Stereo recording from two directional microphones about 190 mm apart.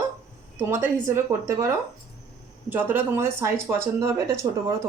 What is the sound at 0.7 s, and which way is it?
Speech, 10° right (ahead or behind).